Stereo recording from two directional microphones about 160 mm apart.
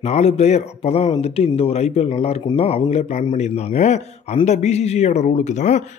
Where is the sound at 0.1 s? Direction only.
40° left (ahead or behind).